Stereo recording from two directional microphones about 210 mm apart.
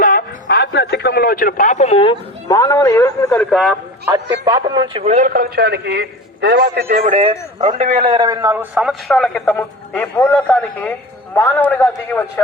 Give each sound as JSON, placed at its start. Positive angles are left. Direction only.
{"t": 0.0, "sound": "a man's voice", "side_deg": 45}
{"t": 3.5, "sound": "a man's voice", "side_deg": 0}
{"t": 4.4, "sound": "speech", "side_deg": -20}
{"t": 5.0, "sound": "a man's voice", "side_deg": -35}